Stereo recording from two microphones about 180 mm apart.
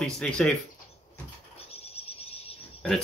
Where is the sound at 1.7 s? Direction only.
35° left (ahead or behind).